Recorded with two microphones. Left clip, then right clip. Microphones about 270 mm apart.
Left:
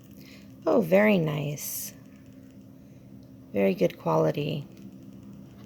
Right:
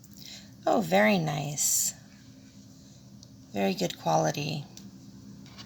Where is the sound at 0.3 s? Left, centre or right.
Centre.